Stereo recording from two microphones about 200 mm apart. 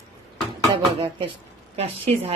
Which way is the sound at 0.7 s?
25° right (ahead or behind).